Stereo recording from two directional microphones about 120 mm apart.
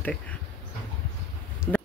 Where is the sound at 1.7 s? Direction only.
15° left (ahead or behind).